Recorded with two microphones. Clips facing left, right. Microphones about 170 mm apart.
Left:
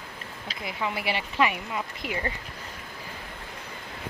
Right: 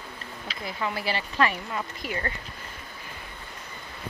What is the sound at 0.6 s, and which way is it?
Speech, 20° left (ahead or behind).